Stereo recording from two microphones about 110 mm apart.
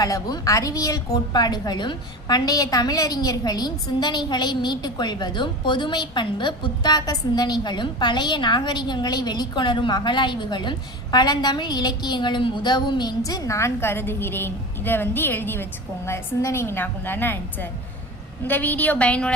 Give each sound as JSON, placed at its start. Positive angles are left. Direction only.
{"t": 0.0, "sound": "a woman's voice", "side_deg": 35}